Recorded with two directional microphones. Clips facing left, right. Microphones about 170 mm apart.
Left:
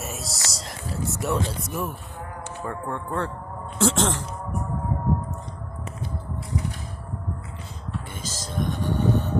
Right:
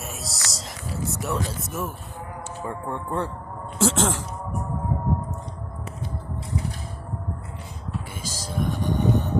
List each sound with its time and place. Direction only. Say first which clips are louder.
0.0 s music: left 2 dB; centre (ahead or behind)
0.5 s a sound: left 1 dB; centre (ahead or behind)
1.5 s speech: left 1 dB; centre (ahead or behind)
2.6 s speech: even; 15° right (ahead or behind)
8.1 s music: even; 10° right (ahead or behind)